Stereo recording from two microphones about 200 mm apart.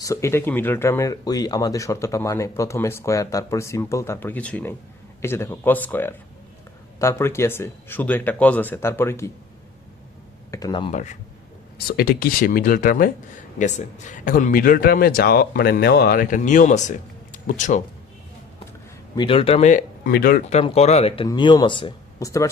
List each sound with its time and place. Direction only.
0.0 s speech: 15° left (ahead or behind)
10.5 s speech: 20° left (ahead or behind); by 11.2 s 35° left (ahead or behind)
11.9 s speech: 50° left (ahead or behind)
19.1 s speech: 25° left (ahead or behind); by 20.4 s 50° left (ahead or behind)
20.4 s speech: 30° left (ahead or behind); by 22.4 s 15° left (ahead or behind)